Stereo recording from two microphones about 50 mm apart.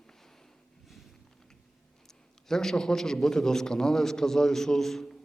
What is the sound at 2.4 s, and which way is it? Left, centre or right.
A man's voice, centre.